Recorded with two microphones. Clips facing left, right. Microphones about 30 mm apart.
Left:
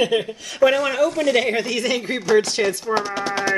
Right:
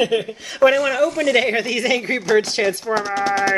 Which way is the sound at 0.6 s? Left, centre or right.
Right.